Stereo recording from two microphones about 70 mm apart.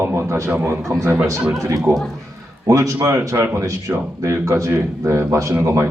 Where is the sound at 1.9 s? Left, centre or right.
Right.